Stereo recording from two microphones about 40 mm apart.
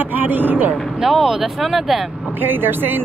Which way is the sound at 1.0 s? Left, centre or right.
Centre.